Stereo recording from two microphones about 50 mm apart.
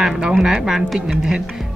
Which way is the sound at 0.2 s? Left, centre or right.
Centre.